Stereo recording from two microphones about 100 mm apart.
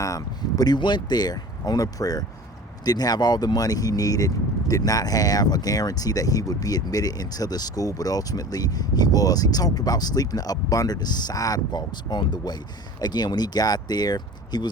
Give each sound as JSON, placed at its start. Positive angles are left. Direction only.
{"t": 0.0, "sound": "speech", "side_deg": 35}